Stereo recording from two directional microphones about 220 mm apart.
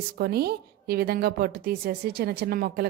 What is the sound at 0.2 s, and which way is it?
A woman's voice, 45° right (ahead or behind).